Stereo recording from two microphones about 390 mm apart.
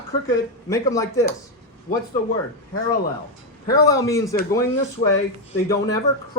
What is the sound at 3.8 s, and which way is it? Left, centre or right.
Speech, centre.